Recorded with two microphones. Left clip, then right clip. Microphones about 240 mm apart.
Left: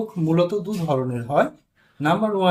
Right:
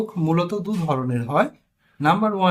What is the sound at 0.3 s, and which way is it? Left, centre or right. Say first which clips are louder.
Speech: left 3 dB; centre.